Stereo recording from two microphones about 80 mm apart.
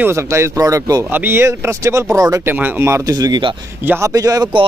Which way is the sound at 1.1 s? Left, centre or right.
Right.